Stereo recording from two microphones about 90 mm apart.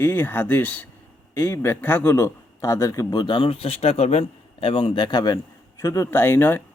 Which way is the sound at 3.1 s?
55° left (ahead or behind).